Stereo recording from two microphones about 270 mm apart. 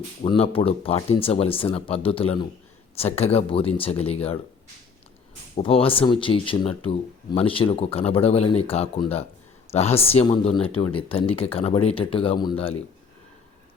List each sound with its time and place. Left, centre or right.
0.2 s speech: left
5.5 s speech: left